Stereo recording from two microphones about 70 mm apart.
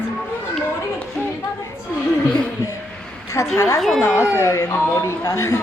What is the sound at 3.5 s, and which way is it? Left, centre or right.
A woman's voice, left.